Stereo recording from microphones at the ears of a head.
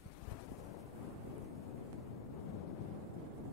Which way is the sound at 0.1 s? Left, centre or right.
Left.